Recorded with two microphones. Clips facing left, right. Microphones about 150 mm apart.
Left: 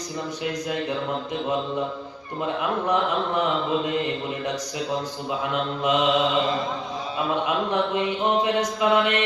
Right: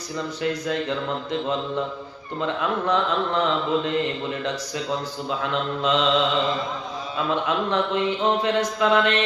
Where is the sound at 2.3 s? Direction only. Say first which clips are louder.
Right 1 dB; 15° left (ahead or behind).